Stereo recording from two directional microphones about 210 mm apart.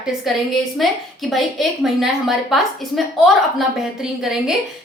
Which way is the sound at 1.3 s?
Centre (ahead or behind).